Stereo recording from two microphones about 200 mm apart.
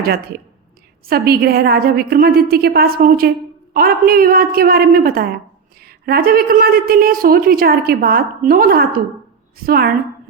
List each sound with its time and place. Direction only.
0.0 s a woman's voice: 50° right (ahead or behind)